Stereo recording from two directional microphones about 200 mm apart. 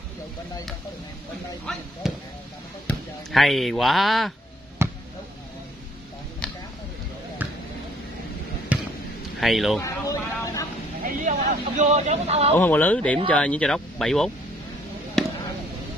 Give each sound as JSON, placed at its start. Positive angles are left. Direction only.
{"t": 2.0, "sound": "speech", "side_deg": 0}
{"t": 4.8, "sound": "basketball bounce", "side_deg": -10}
{"t": 6.4, "sound": "a sound", "side_deg": 5}
{"t": 8.7, "sound": "a sound", "side_deg": -5}
{"t": 9.4, "sound": "speech", "side_deg": 0}
{"t": 9.8, "sound": "a sound", "side_deg": 15}
{"t": 11.1, "sound": "speech", "side_deg": -40}
{"t": 12.5, "sound": "speech", "side_deg": 10}
{"t": 15.2, "sound": "basketball bounce", "side_deg": 0}